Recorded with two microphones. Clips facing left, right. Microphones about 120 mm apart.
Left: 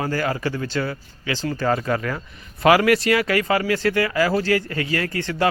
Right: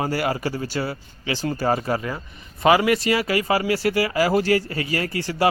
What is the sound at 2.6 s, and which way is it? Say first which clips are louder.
Speech: left 2 dB; centre (ahead or behind).